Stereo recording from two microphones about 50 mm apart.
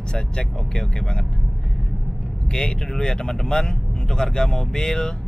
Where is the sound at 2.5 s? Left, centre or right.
Centre.